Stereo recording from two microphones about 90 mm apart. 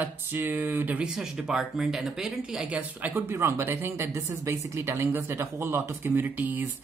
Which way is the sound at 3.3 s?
30° right (ahead or behind).